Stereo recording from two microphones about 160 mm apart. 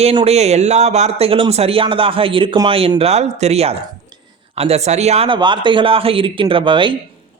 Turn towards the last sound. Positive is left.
turn(degrees=-30)  # may be behind; listen again after turning